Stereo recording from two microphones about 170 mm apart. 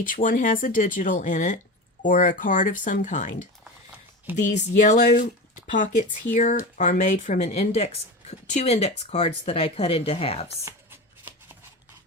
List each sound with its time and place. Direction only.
0.0 s speech: 50° left (ahead or behind)
4.4 s speech: 45° left (ahead or behind)
6.3 s speech: 45° left (ahead or behind)